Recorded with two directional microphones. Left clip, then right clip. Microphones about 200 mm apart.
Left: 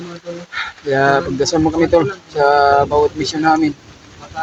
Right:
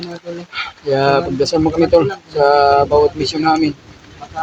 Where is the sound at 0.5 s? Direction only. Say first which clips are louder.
Even; centre (ahead or behind).